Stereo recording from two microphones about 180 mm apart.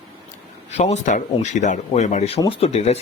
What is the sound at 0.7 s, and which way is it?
Speech, 40° left (ahead or behind).